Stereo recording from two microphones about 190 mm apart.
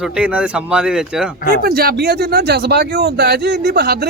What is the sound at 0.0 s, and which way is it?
Speech, 5° right (ahead or behind).